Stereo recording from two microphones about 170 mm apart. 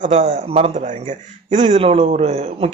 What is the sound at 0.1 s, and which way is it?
Speech, 35° right (ahead or behind).